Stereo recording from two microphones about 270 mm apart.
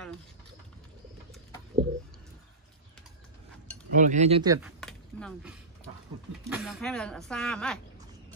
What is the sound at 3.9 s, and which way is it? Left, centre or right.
Speech, right.